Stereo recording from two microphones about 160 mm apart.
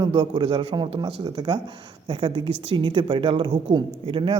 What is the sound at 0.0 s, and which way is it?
A man's voice, 30° right (ahead or behind).